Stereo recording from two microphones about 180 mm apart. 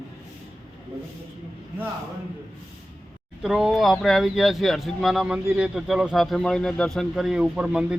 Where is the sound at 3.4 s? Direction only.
5° right (ahead or behind).